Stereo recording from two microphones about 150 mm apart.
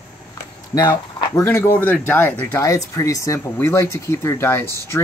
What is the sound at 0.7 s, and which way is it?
Speech, 25° left (ahead or behind).